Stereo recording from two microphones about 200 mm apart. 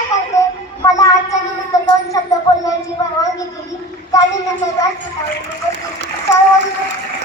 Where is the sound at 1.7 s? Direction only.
15° left (ahead or behind).